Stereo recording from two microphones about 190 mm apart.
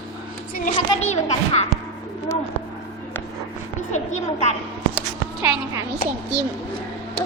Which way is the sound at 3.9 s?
40° left (ahead or behind).